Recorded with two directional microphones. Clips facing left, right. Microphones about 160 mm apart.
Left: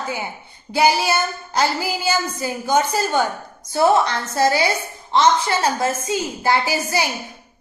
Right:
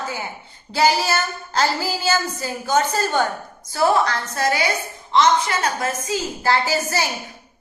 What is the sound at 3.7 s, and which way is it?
A woman's voice, 20° left (ahead or behind).